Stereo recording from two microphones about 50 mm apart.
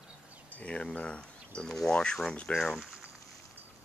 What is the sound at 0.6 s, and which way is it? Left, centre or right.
Speech, left.